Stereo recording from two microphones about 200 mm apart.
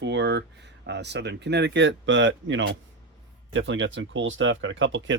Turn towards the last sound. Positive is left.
turn(degrees=-70)  # may be behind; listen again after turning